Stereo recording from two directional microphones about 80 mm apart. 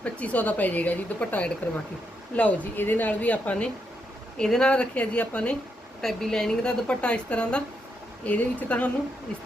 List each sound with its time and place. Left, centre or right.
0.0 s a woman's voice: centre
6.0 s a woman's voice: centre